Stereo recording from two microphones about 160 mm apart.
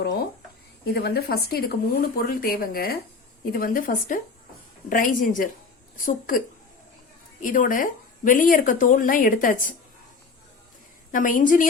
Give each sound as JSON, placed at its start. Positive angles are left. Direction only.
{"t": 0.9, "sound": "speech", "side_deg": 80}
{"t": 7.4, "sound": "speech", "side_deg": 55}
{"t": 11.1, "sound": "speech", "side_deg": 55}